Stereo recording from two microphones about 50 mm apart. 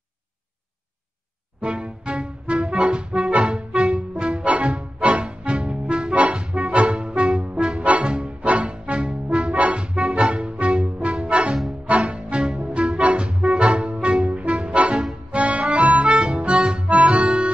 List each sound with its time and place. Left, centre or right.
1.6 s music: centre
6.4 s music: centre
6.7 s music: right
15.7 s accordion: right